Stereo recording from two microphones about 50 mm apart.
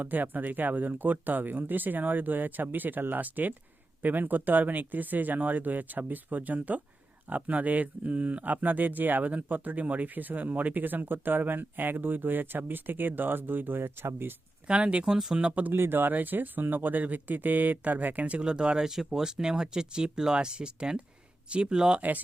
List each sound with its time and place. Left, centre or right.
0.0 s speech: right
14.7 s speech: right
15.7 s speech: right; by 22.0 s centre